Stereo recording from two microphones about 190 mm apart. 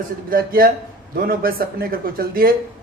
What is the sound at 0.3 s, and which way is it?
Speech, 50° right (ahead or behind).